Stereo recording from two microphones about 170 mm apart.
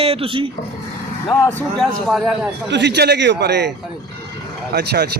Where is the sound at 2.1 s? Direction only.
Centre (ahead or behind).